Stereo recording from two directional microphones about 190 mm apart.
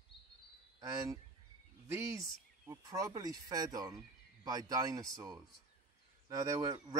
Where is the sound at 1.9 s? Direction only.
15° right (ahead or behind).